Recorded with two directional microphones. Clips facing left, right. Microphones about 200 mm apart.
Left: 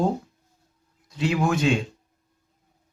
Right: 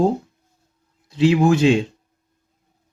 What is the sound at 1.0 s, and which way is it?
Speech, 25° right (ahead or behind).